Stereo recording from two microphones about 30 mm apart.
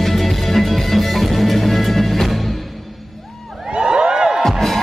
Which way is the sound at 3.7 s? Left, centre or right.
Right.